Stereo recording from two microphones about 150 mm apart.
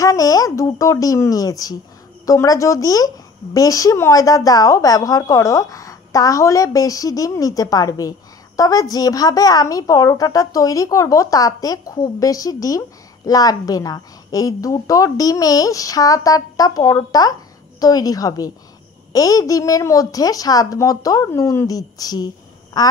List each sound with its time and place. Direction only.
0.0 s a woman's voice: 25° left (ahead or behind)